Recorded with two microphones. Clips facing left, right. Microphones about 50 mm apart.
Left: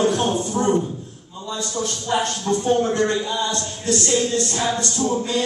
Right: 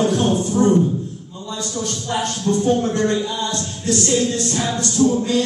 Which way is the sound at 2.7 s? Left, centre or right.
Centre.